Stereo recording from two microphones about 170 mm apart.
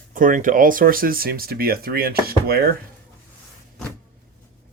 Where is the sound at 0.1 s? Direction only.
55° right (ahead or behind).